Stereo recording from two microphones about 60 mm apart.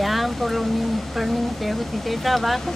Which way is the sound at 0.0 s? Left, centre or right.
Centre.